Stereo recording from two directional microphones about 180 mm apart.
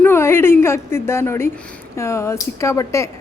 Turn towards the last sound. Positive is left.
turn(degrees=15)  # may be behind; listen again after turning